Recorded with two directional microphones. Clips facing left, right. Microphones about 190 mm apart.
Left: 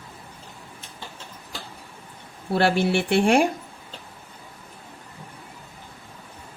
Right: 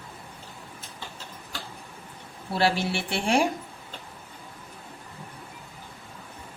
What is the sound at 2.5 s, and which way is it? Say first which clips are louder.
Speech: left 5 dB; 55° left (ahead or behind).